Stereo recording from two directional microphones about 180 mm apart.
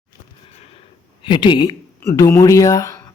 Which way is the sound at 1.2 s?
25° left (ahead or behind).